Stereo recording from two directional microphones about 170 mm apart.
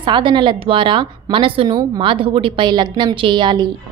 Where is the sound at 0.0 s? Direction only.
30° right (ahead or behind).